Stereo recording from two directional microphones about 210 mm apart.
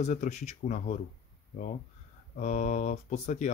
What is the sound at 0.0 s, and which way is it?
Speech, 35° left (ahead or behind).